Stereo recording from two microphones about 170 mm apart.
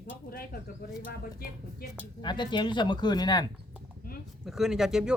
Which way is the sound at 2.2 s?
25° left (ahead or behind).